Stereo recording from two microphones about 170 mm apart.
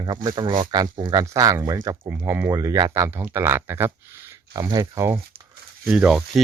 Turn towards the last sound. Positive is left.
turn(degrees=-5)  # may be behind; listen again after turning